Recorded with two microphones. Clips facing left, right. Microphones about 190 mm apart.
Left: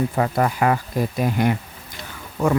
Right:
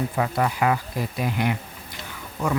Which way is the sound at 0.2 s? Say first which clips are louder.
Left 2 dB; 45° left (ahead or behind).